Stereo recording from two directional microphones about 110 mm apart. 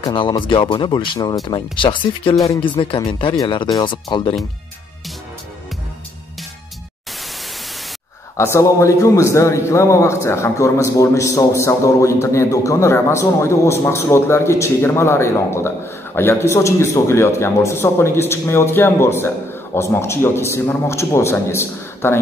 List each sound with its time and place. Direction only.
0.0 s speech: 45° left (ahead or behind)
8.4 s a man's voice: 25° left (ahead or behind)